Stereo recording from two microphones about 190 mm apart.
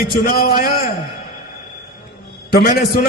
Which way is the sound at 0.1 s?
55° left (ahead or behind).